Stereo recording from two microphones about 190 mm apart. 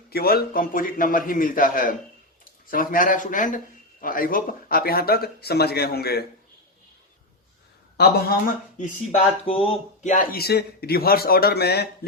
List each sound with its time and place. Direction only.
0.1 s speech: 55° left (ahead or behind)
7.9 s speech: 55° left (ahead or behind)
8.8 s speech: 30° left (ahead or behind); by 11.9 s 55° left (ahead or behind)